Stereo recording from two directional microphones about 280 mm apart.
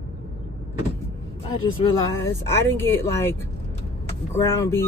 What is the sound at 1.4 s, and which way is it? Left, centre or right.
Speech, centre.